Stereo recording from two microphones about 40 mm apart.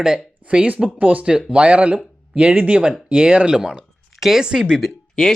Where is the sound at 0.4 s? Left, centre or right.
Right.